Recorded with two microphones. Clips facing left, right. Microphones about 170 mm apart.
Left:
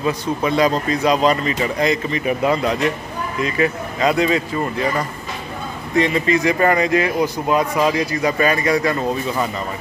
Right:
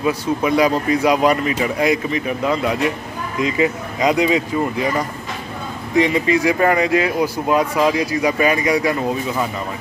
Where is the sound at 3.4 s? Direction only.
15° right (ahead or behind).